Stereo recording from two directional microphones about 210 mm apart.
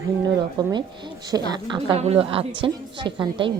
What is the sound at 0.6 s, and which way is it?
Speech, 20° right (ahead or behind).